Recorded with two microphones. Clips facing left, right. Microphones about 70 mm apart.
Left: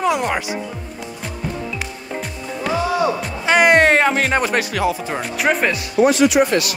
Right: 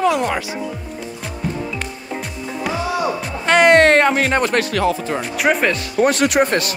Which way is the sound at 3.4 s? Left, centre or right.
Centre.